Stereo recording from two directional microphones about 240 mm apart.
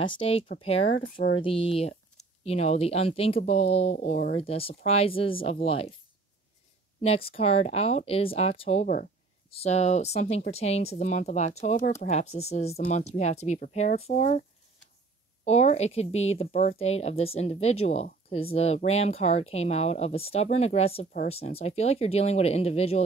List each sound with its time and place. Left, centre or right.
0.0 s speech: left
0.9 s speech: left
1.3 s speech: left
7.0 s speech: left
15.4 s speech: left